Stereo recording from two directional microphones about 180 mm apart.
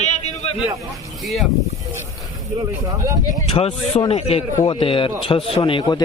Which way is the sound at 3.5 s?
35° left (ahead or behind).